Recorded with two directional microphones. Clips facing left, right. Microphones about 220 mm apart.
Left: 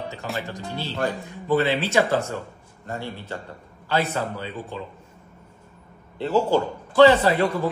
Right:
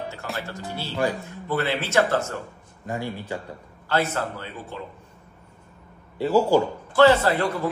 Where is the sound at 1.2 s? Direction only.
15° left (ahead or behind).